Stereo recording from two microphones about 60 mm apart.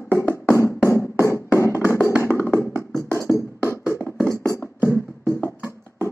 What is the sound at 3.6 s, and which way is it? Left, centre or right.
Music, left.